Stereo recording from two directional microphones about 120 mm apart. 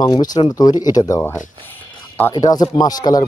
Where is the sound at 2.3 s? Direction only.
35° left (ahead or behind).